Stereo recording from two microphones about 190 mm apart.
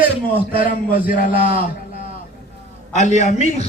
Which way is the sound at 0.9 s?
45° left (ahead or behind).